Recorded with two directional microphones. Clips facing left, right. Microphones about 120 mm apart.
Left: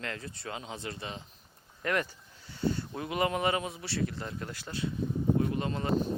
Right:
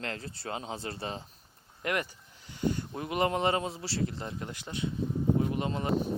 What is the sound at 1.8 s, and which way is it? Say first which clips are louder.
Speech: left 1 dB; 15° right (ahead or behind).